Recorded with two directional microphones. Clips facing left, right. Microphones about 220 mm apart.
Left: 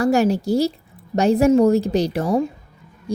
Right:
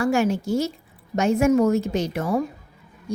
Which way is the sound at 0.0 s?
40° left (ahead or behind).